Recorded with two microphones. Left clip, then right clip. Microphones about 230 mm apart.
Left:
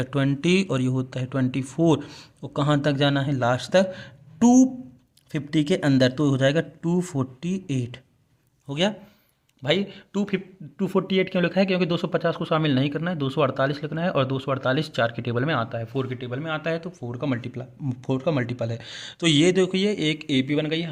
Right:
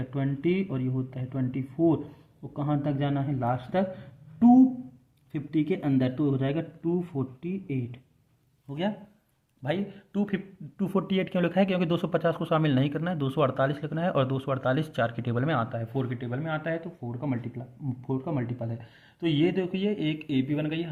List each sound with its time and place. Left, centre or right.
0.0 s speech: left
8.6 s a man's voice: left
9.6 s a man's voice: left
17.1 s speech: left